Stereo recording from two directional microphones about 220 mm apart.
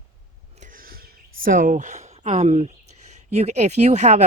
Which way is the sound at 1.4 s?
40° right (ahead or behind).